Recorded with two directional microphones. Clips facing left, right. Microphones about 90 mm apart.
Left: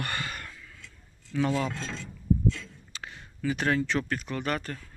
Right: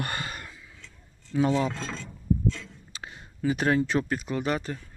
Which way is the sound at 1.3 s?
25° right (ahead or behind).